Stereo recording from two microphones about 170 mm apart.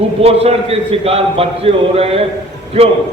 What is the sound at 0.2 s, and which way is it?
A man's voice, 35° right (ahead or behind).